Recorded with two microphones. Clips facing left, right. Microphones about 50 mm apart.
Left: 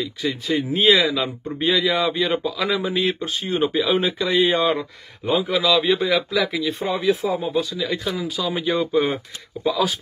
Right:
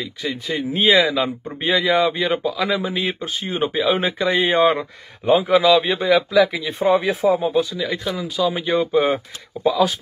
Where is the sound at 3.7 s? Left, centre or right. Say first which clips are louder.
Right 3 dB; centre.